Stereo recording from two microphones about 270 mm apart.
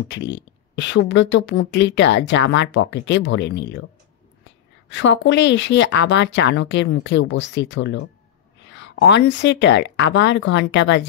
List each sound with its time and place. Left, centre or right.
0.1 s speech: left
4.8 s speech: left